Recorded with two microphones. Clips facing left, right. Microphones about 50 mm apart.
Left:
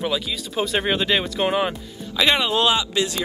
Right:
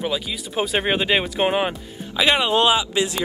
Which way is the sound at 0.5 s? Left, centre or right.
Centre.